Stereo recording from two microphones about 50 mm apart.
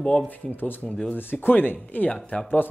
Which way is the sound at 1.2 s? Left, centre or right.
Left.